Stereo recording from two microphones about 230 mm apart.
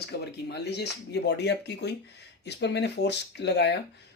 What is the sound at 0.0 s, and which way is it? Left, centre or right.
Speech, left.